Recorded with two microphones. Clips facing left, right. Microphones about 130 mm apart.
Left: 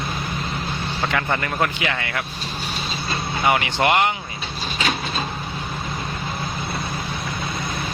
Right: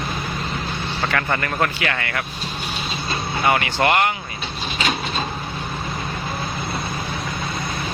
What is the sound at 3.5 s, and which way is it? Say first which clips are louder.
Speech: even; 15° left (ahead or behind).